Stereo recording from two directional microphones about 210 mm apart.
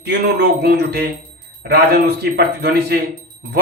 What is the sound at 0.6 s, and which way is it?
Speech, 50° right (ahead or behind).